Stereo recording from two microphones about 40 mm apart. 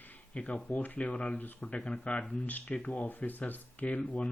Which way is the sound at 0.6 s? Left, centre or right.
Left.